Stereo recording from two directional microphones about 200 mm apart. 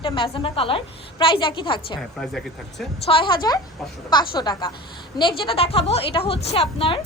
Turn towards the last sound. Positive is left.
turn(degrees=25)  # may be behind; listen again after turning